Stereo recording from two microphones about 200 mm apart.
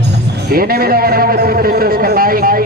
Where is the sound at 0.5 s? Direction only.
50° right (ahead or behind).